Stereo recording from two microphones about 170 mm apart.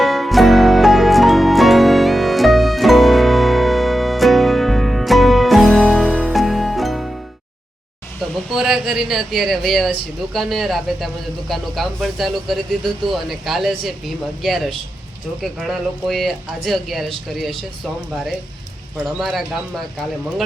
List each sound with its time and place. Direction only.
0.0 s music: centre (ahead or behind)
8.5 s speech: centre (ahead or behind)
19.0 s speech: centre (ahead or behind)